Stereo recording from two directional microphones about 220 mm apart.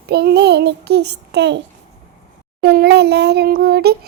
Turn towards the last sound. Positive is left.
turn(degrees=-45)  # may be behind; listen again after turning